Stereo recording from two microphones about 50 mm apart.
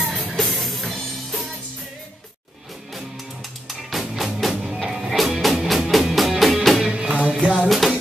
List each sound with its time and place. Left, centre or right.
0.2 s music: centre
3.6 s music: centre
6.9 s music: right
7.6 s music: centre